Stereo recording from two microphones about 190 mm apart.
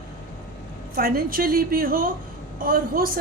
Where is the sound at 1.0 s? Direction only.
50° right (ahead or behind).